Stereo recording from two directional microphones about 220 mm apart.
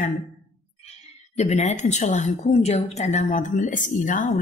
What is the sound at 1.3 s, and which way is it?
A woman's voice, 30° left (ahead or behind).